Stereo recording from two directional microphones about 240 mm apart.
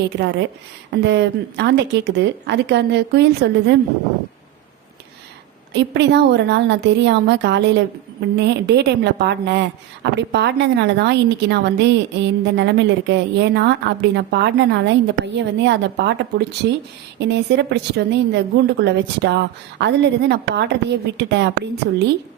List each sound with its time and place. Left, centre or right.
1.0 s a woman's voice: right
5.7 s a woman's voice: right